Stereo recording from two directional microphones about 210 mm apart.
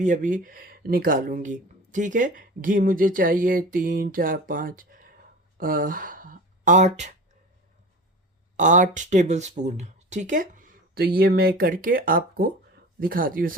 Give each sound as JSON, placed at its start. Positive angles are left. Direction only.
{"t": 0.0, "sound": "speech", "side_deg": -40}
{"t": 8.5, "sound": "speech", "side_deg": -35}